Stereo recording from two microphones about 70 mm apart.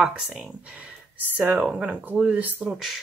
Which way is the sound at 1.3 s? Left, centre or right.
Right.